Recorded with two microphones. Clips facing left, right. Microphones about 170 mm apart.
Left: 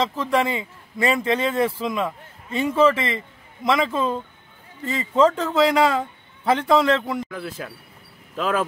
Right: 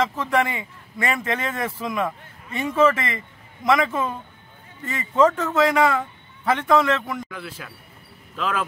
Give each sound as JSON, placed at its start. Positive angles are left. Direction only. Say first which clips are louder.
{"t": 0.0, "sound": "a man's voice", "louder": "even", "side_deg": 30}
{"t": 7.3, "sound": "a man's voice", "louder": "left 5 dB", "side_deg": 40}